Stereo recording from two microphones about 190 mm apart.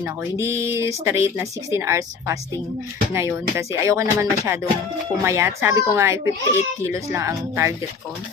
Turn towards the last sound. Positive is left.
turn(degrees=-15)  # may be behind; listen again after turning